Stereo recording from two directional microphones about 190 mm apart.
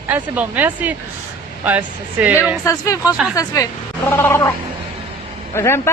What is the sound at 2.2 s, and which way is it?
Speech, 10° right (ahead or behind).